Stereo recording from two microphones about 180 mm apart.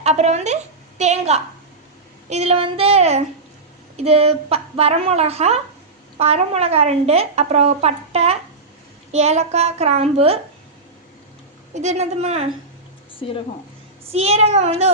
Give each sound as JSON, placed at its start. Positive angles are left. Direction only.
{"t": 0.0, "sound": "a woman's voice", "side_deg": -40}
{"t": 11.7, "sound": "a woman's voice", "side_deg": -40}
{"t": 13.1, "sound": "speech", "side_deg": 30}
{"t": 14.1, "sound": "a woman's voice", "side_deg": -35}